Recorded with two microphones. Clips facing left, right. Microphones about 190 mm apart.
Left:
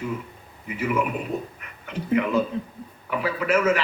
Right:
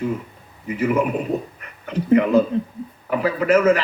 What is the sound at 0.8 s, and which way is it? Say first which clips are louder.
A man's voice: right 5 dB; 40° right (ahead or behind).